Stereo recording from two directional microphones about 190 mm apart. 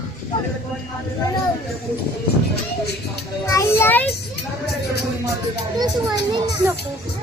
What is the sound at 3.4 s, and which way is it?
Child singing, 15° left (ahead or behind).